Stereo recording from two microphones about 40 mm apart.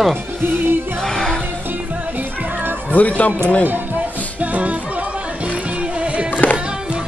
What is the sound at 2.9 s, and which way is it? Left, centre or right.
Speech, left.